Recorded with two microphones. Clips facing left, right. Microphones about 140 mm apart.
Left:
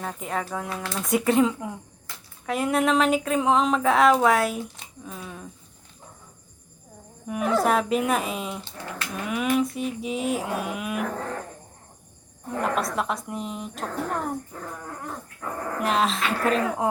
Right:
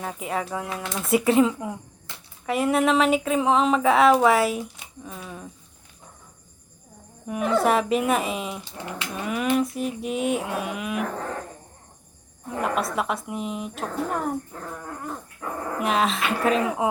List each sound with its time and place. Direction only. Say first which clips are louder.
0.0 s speech: right 1 dB; 5° right (ahead or behind)
7.3 s speech: right 1 dB; centre (ahead or behind)
8.6 s speech: right 2 dB; 15° right (ahead or behind)
9.2 s speech: right 1 dB; centre (ahead or behind)
12.5 s a woman's voice: even; 5° right (ahead or behind)